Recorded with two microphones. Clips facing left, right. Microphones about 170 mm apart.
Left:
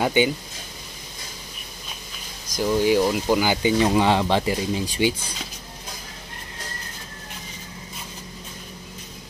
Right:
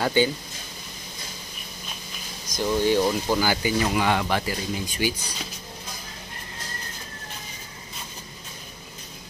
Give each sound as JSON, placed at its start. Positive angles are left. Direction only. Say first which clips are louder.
{"t": 0.0, "sound": "speech", "louder": "left 2 dB", "side_deg": 15}
{"t": 2.5, "sound": "speech", "louder": "left 2 dB", "side_deg": 10}